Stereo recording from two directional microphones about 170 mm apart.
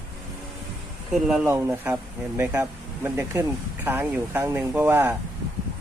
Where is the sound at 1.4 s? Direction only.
15° right (ahead or behind).